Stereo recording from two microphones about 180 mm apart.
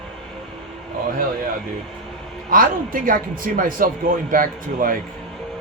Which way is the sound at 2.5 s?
50° right (ahead or behind).